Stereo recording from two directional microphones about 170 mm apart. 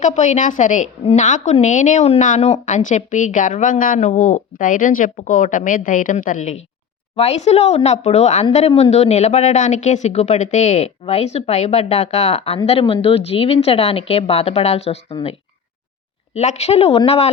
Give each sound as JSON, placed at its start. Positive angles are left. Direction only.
{"t": 0.0, "sound": "a woman's voice", "side_deg": 45}